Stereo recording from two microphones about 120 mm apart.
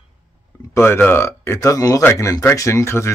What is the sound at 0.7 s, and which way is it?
Speech, 20° left (ahead or behind).